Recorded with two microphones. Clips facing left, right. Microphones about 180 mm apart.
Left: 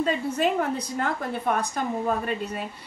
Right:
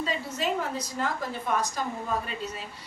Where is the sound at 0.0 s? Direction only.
55° left (ahead or behind).